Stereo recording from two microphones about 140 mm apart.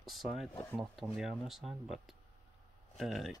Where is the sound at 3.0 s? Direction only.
Centre (ahead or behind).